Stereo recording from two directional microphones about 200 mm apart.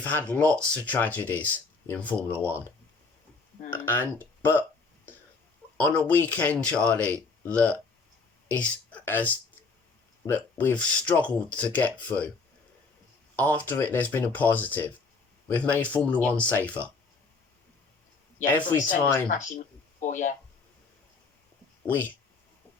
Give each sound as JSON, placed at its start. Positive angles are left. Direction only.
{"t": 0.0, "sound": "speech", "side_deg": 5}
{"t": 3.7, "sound": "speech", "side_deg": 10}
{"t": 5.7, "sound": "speech", "side_deg": 5}
{"t": 13.3, "sound": "speech", "side_deg": 10}
{"t": 18.5, "sound": "speech", "side_deg": 10}
{"t": 20.0, "sound": "speech", "side_deg": 40}